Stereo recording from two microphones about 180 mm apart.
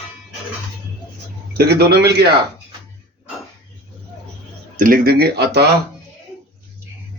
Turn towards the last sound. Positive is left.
turn(degrees=-65)  # may be behind; listen again after turning